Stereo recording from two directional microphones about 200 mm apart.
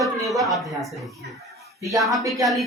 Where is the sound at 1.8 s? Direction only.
15° right (ahead or behind).